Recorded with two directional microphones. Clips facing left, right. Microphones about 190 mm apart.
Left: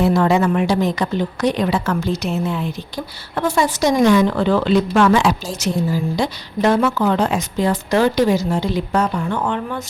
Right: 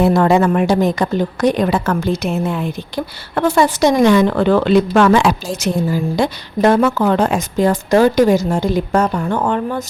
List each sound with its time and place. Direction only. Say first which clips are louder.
0.0 s a woman's voice: right 3 dB; 50° right (ahead or behind)